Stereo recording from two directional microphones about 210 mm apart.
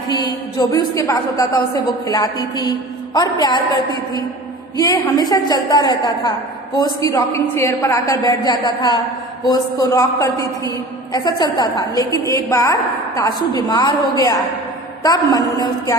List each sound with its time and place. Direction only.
0.1 s a woman's voice: 20° left (ahead or behind)
4.8 s a woman's voice: 15° left (ahead or behind)